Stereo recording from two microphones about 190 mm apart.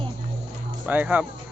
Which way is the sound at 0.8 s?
10° right (ahead or behind).